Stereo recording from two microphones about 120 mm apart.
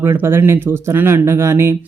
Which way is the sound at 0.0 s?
20° right (ahead or behind).